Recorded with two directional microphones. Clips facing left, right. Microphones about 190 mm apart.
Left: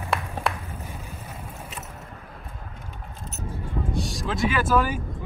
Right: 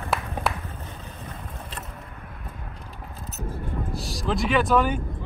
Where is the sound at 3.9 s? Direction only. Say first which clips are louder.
Right 1 dB; centre (ahead or behind).